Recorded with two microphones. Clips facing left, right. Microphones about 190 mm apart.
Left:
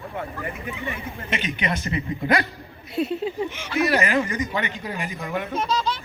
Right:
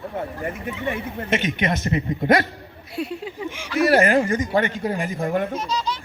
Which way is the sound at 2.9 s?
25° left (ahead or behind).